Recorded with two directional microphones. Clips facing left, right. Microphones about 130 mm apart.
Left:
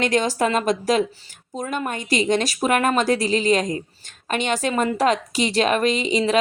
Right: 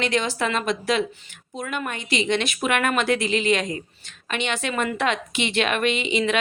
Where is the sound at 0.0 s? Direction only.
45° left (ahead or behind).